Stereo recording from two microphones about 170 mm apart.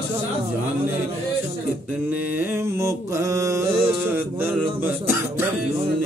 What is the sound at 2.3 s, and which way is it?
Mantra, 15° right (ahead or behind).